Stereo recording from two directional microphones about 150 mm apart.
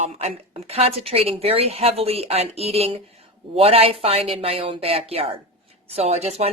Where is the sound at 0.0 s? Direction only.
45° right (ahead or behind).